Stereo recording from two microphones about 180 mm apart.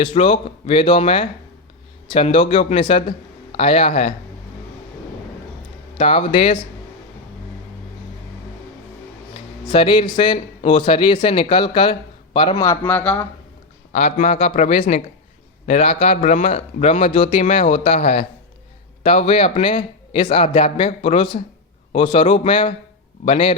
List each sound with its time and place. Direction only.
0.0 s speech: 30° left (ahead or behind)
6.0 s speech: 30° left (ahead or behind)
9.6 s speech: 25° left (ahead or behind)
12.6 s speech: 10° left (ahead or behind)
13.9 s speech: 40° left (ahead or behind)